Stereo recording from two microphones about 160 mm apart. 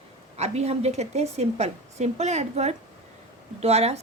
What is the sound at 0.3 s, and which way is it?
A woman's voice, 45° right (ahead or behind).